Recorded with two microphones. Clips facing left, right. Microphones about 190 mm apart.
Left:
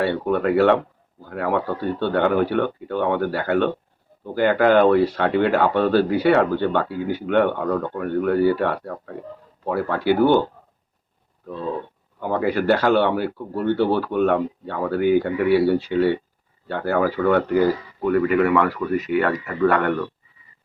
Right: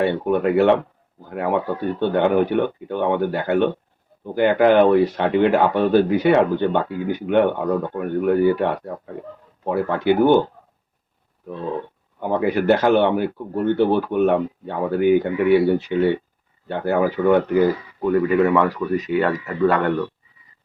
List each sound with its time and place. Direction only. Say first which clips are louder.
0.0 s speech: right 2 dB; 15° right (ahead or behind)
12.2 s speech: right 2 dB; 20° right (ahead or behind)